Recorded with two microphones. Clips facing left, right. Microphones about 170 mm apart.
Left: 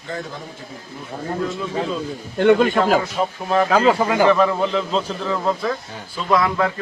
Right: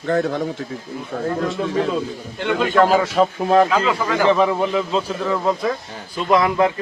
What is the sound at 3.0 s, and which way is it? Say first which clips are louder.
Speech: right 5 dB; 75° right (ahead or behind).